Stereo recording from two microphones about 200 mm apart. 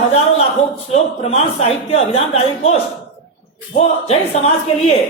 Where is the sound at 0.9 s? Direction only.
30° left (ahead or behind).